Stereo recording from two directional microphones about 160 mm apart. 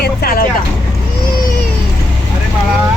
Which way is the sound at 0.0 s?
70° left (ahead or behind).